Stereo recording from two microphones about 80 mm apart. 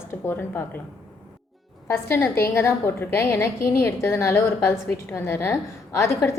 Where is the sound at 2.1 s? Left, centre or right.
Left.